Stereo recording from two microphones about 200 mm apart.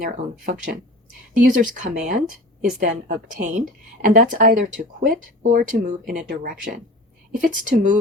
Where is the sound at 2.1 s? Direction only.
45° right (ahead or behind).